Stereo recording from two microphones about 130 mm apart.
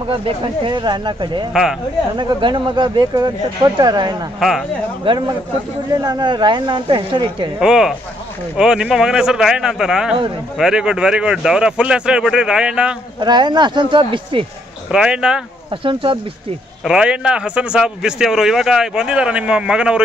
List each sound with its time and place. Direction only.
0.7 s speech: 35° right (ahead or behind)
1.5 s speech: 5° right (ahead or behind)
2.1 s speech: 35° right (ahead or behind)
4.4 s speech: centre (ahead or behind)
5.0 s speech: 35° right (ahead or behind)
7.6 s speech: 5° right (ahead or behind)
13.2 s speech: 35° right (ahead or behind)
14.9 s a man's voice: 5° right (ahead or behind)
15.7 s speech: 40° right (ahead or behind)
16.8 s a man's voice: 5° right (ahead or behind)